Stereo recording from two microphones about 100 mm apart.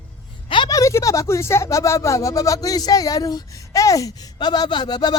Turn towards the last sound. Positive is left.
turn(degrees=45)  # may be behind; listen again after turning